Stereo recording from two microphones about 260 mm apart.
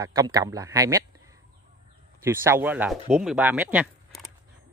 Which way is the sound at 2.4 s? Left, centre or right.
Centre.